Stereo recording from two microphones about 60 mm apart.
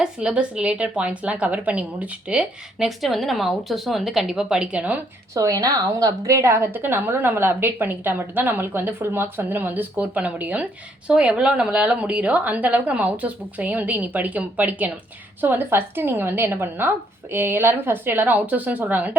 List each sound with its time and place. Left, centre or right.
0.0 s a woman's voice: centre
2.7 s speech: centre; by 4.9 s right
5.3 s a woman's voice: right